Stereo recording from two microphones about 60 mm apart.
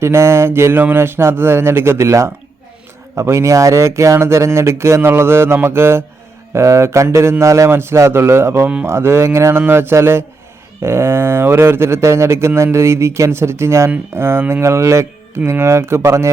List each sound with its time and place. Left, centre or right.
0.0 s speech: right
6.5 s speech: right
7.7 s speech: right